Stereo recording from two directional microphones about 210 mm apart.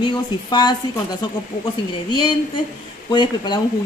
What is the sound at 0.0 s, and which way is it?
Speech, 20° left (ahead or behind).